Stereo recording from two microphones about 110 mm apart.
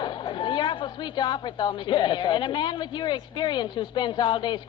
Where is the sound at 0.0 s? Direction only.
45° left (ahead or behind).